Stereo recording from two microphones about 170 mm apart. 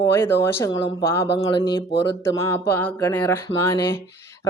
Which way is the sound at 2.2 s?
15° left (ahead or behind).